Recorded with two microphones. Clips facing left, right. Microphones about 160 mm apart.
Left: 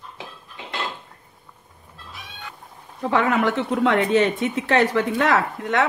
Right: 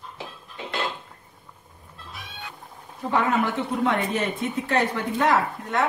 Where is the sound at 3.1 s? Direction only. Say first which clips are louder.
Left 3 dB; 85° left.